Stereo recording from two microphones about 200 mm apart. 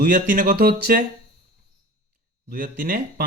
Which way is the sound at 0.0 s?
40° right (ahead or behind).